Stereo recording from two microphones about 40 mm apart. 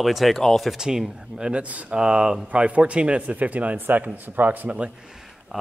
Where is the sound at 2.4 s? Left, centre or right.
Right.